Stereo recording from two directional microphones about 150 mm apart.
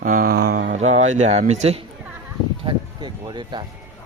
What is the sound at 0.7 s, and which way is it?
A man's voice, 50° right (ahead or behind).